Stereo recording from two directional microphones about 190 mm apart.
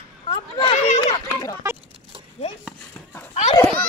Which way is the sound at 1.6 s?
15° right (ahead or behind).